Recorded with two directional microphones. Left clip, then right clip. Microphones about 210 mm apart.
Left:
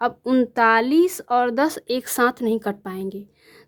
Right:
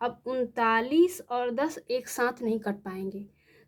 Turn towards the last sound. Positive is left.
turn(degrees=35)  # may be behind; listen again after turning